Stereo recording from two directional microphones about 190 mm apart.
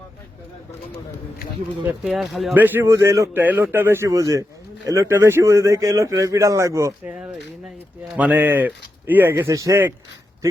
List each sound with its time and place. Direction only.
1.8 s speech: 5° right (ahead or behind)
7.1 s speech: 5° right (ahead or behind)